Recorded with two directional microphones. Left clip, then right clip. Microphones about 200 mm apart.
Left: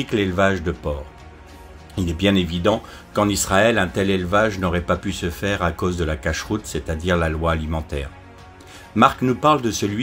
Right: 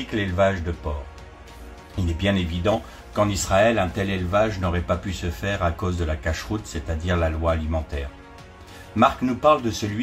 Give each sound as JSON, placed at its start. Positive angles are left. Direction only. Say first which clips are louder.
{"t": 0.1, "sound": "speech", "louder": "left 2 dB", "side_deg": 45}
{"t": 2.1, "sound": "speech", "louder": "left 5 dB", "side_deg": 45}